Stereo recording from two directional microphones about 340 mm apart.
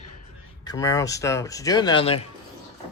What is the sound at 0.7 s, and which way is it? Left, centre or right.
Speech, centre.